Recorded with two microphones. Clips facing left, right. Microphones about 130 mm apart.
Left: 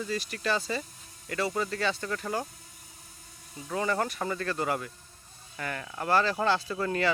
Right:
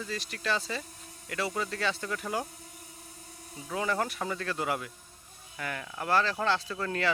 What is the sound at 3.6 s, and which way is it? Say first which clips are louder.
Speech: left 2 dB; centre (ahead or behind).